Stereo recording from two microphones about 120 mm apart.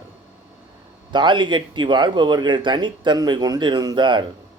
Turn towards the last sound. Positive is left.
turn(degrees=-40)  # may be behind; listen again after turning